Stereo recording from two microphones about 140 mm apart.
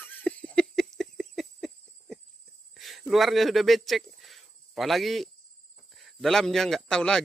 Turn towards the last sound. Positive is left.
turn(degrees=5)  # may be behind; listen again after turning